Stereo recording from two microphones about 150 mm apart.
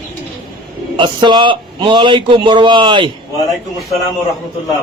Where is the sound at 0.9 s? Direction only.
30° right (ahead or behind).